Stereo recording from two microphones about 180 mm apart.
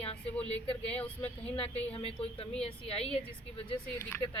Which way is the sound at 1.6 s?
30° left (ahead or behind).